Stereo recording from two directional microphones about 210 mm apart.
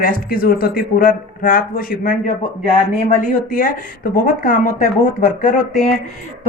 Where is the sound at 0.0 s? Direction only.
45° left (ahead or behind).